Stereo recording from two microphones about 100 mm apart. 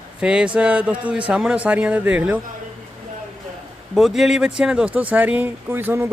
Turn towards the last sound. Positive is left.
turn(degrees=-20)  # may be behind; listen again after turning